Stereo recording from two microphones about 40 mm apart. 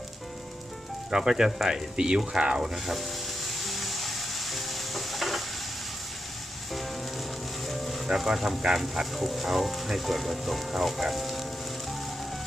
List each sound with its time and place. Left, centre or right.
1.1 s speech: centre
2.7 s music: centre
7.7 s music: centre
8.1 s speech: centre